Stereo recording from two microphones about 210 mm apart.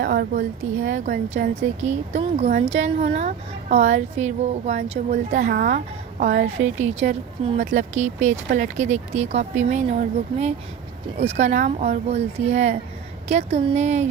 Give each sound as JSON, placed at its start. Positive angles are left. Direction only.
{"t": 0.0, "sound": "a woman's voice", "side_deg": -45}